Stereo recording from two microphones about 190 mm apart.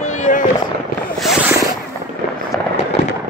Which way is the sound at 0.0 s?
40° left (ahead or behind).